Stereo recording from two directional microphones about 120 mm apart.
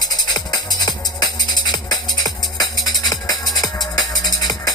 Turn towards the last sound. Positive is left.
turn(degrees=30)  # may be behind; listen again after turning